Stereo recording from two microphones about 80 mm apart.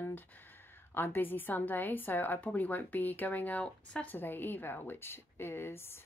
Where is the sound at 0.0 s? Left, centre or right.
Left.